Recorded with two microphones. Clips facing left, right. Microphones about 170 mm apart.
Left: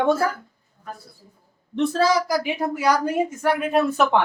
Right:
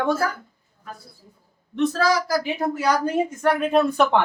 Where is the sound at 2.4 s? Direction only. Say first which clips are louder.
Even; 10° left (ahead or behind).